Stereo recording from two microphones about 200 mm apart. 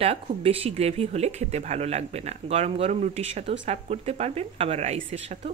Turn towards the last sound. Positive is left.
turn(degrees=-30)  # may be behind; listen again after turning